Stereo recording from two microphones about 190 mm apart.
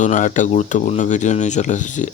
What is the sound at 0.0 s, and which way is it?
Speech, 40° left (ahead or behind).